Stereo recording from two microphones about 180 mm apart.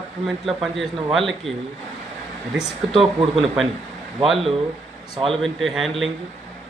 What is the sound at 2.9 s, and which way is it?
Speech, 30° right (ahead or behind).